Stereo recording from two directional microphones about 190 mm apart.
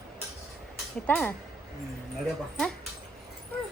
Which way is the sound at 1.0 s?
10° left (ahead or behind).